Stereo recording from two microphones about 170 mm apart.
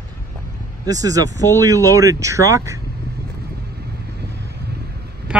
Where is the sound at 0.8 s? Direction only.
20° right (ahead or behind).